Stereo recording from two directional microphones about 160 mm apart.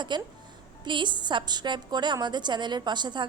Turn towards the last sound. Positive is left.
turn(degrees=-30)  # may be behind; listen again after turning